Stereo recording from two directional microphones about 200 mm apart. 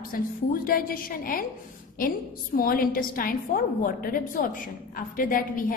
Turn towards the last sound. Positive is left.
turn(degrees=45)  # may be behind; listen again after turning